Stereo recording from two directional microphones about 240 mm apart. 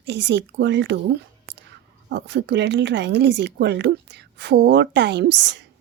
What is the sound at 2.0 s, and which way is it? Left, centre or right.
Speech, right.